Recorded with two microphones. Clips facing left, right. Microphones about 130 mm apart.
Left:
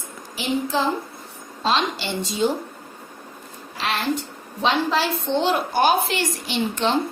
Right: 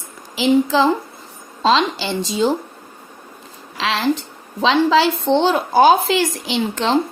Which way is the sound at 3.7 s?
90° right.